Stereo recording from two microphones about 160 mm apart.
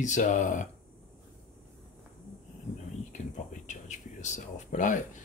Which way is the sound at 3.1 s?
50° left (ahead or behind).